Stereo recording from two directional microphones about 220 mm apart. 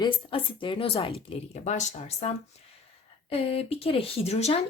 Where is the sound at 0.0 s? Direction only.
25° left (ahead or behind).